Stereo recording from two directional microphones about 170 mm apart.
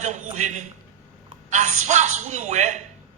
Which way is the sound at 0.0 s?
45° right (ahead or behind).